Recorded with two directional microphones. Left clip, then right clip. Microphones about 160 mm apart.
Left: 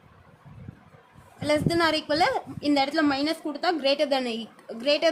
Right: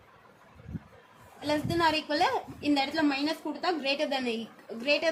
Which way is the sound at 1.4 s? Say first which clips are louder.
Left 5 dB; 50° left (ahead or behind).